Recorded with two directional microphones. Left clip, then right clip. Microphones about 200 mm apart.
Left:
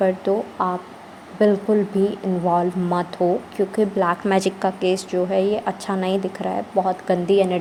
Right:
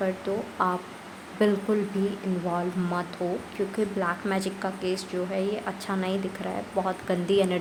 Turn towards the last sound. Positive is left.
turn(degrees=10)  # may be behind; listen again after turning